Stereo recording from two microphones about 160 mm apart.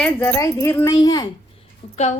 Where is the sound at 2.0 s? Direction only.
45° left (ahead or behind).